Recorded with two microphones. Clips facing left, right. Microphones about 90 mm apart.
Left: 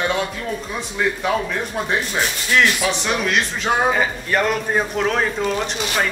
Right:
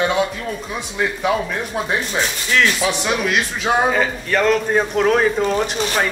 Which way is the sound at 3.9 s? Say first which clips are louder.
Right 1 dB; 10° left (ahead or behind).